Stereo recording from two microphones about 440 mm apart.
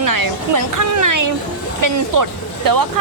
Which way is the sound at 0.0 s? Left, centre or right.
Right.